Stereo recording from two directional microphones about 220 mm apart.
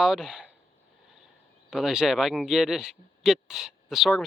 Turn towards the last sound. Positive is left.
turn(degrees=0)  # may be behind; listen again after turning